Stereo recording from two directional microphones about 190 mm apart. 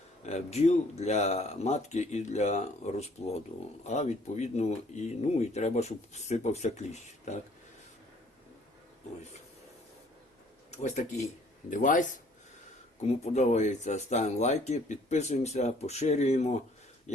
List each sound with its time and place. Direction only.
0.2 s speech: 35° left (ahead or behind)
10.7 s speech: 35° left (ahead or behind)
13.2 s speech: 35° left (ahead or behind)